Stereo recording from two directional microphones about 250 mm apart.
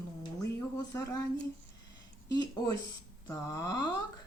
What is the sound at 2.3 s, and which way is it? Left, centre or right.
Speech, centre.